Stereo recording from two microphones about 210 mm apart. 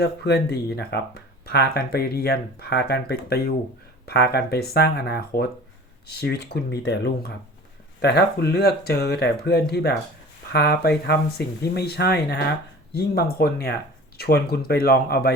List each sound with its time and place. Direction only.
0.0 s speech: 50° left (ahead or behind)